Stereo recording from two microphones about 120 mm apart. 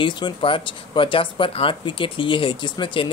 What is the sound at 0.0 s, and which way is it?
Speech, 45° left (ahead or behind).